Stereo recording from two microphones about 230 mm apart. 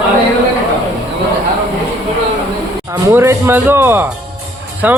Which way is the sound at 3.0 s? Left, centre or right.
Centre.